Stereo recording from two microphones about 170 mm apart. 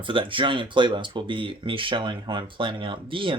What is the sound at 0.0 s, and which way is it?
Speech, 30° right (ahead or behind).